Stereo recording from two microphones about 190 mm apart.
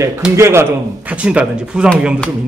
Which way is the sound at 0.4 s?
15° right (ahead or behind).